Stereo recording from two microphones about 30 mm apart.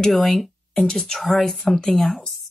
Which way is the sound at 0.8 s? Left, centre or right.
Centre.